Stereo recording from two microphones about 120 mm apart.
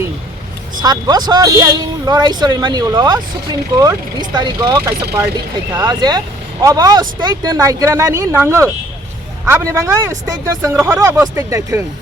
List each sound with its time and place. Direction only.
0.8 s speech: 35° right (ahead or behind)
4.8 s speech: 15° right (ahead or behind)
5.7 s speech: 35° right (ahead or behind)